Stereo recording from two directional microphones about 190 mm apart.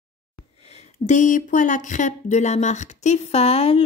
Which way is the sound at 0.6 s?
35° left (ahead or behind).